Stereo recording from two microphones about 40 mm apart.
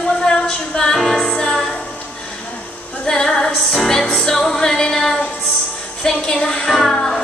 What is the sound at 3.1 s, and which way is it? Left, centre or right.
Female singing, centre.